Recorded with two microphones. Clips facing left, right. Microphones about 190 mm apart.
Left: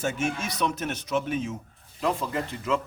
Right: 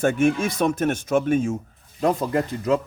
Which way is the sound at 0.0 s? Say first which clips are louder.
Right 9 dB; 55° right (ahead or behind).